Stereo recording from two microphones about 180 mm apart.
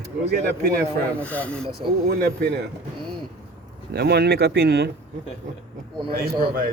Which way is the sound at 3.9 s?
65° right (ahead or behind).